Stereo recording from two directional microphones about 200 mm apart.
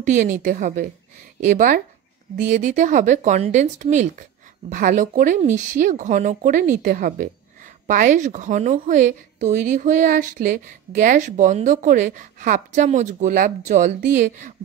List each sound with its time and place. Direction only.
0.0 s speech: 40° right (ahead or behind)